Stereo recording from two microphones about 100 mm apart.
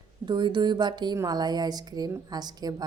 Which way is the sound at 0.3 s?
50° right (ahead or behind).